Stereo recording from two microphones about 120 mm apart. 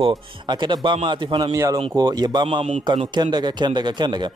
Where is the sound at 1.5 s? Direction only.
25° right (ahead or behind).